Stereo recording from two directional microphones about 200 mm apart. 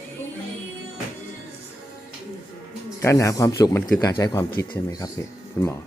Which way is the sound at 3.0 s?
15° left (ahead or behind).